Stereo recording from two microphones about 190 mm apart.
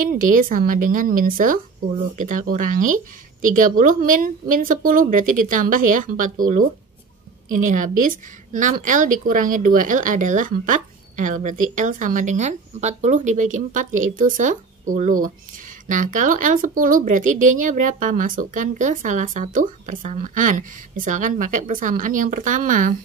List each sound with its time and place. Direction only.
0.0 s a woman's voice: 45° right (ahead or behind)